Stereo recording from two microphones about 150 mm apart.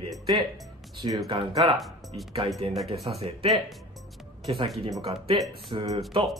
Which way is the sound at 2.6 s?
40° right (ahead or behind).